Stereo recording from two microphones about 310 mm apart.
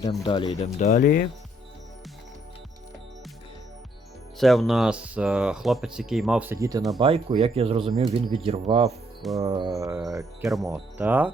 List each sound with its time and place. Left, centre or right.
0.3 s speech: centre
4.4 s speech: centre